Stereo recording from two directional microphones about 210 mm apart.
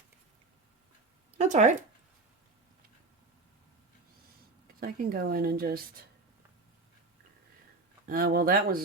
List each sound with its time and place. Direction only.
1.4 s speech: 35° right (ahead or behind)
4.8 s speech: 45° right (ahead or behind)
8.0 s speech: 45° right (ahead or behind)